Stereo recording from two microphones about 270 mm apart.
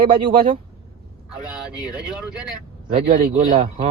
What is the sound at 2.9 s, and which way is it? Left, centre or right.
Speech, right.